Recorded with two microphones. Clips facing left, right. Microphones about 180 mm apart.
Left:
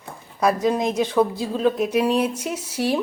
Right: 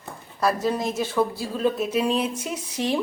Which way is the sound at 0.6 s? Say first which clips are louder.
Left 4 dB; 15° left (ahead or behind).